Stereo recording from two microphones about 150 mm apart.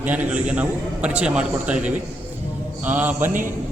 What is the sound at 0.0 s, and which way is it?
A man's voice, 10° right (ahead or behind).